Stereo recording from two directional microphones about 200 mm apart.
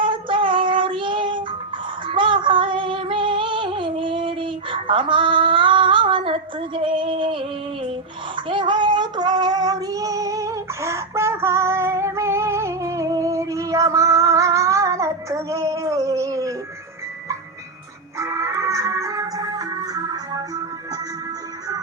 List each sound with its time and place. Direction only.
0.0 s child singing: 25° right (ahead or behind)
2.0 s female singing: 25° right (ahead or behind)
8.4 s child singing: 25° right (ahead or behind)
18.2 s music: 15° right (ahead or behind)